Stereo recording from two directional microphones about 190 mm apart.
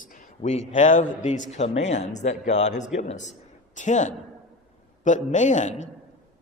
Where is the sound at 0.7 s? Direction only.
40° left (ahead or behind).